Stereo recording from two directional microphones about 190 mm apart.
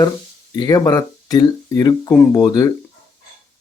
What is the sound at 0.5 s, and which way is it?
Speech, 20° left (ahead or behind).